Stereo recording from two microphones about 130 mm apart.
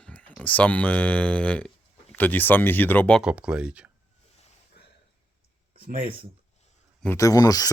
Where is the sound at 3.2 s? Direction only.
10° right (ahead or behind).